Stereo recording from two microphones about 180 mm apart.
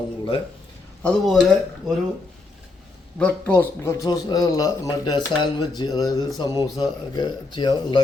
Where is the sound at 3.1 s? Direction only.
10° left (ahead or behind).